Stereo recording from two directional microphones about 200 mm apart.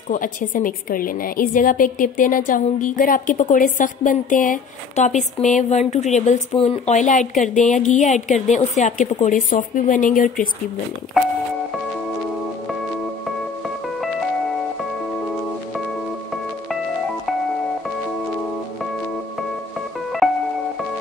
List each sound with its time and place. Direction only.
0.1 s a woman's voice: 40° left (ahead or behind)
20.2 s music: centre (ahead or behind)